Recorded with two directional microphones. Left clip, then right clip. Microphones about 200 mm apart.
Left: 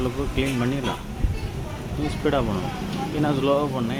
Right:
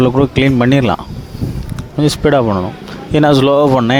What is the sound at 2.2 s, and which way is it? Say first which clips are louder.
Speech: right 11 dB; 55° right (ahead or behind).